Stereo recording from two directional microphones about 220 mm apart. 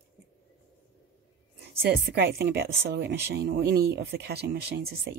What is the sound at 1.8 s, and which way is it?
Speech, 45° right (ahead or behind).